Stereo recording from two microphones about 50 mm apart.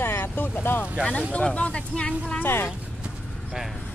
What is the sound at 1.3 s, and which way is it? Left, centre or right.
Speech, left.